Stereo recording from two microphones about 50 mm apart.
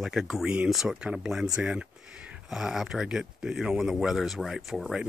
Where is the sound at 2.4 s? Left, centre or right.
Centre.